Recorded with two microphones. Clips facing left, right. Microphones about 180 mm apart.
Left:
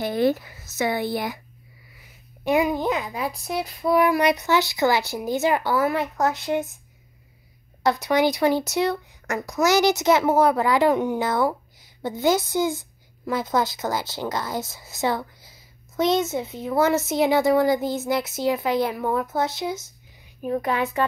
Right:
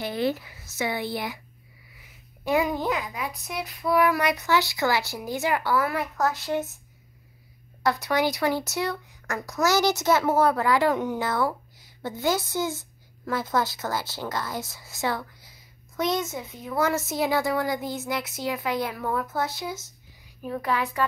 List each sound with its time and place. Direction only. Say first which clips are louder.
0.0 s speech: left 5 dB; 45° left (ahead or behind)
2.4 s child singing: left 3 dB; 15° left (ahead or behind)
7.8 s child singing: left 4 dB; 20° left (ahead or behind)